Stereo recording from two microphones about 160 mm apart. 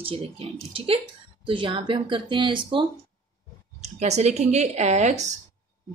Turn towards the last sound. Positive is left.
turn(degrees=-45)  # may be behind; listen again after turning